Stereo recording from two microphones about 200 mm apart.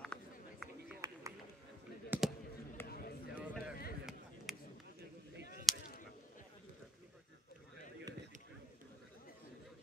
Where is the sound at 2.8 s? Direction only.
50° left (ahead or behind).